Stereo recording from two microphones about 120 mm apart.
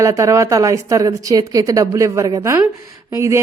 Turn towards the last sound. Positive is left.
turn(degrees=-25)  # may be behind; listen again after turning